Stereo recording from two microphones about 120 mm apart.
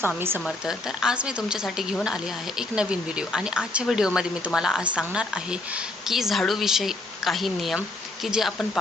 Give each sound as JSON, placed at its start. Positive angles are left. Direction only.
{"t": 0.2, "sound": "speech", "side_deg": -20}
{"t": 0.4, "sound": "speech", "side_deg": -5}